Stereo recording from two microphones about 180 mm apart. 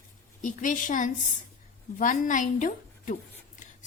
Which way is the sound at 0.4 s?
45° left (ahead or behind).